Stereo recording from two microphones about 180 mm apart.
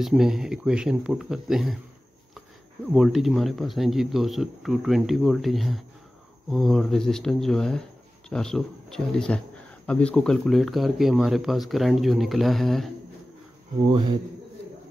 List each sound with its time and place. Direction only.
0.0 s speech: centre (ahead or behind)
2.9 s speech: centre (ahead or behind)